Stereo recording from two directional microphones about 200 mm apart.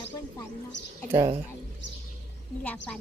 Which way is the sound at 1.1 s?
25° right (ahead or behind).